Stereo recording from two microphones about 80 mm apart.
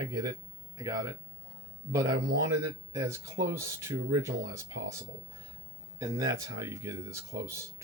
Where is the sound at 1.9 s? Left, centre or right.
Right.